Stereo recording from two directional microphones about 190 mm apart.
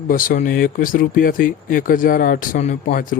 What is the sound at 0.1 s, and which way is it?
Speech, 45° left (ahead or behind).